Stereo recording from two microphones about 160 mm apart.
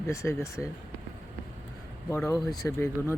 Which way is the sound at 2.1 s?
20° left (ahead or behind).